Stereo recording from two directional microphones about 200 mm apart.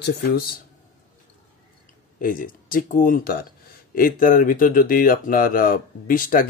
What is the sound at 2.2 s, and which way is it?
Speech, 45° left (ahead or behind).